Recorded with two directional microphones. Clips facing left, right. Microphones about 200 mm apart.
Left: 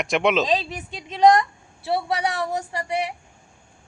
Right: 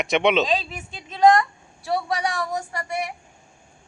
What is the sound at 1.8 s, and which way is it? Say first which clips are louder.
Speech: left 1 dB; 25° left (ahead or behind).